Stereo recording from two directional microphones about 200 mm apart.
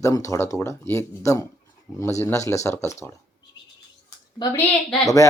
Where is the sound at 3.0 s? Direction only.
15° left (ahead or behind).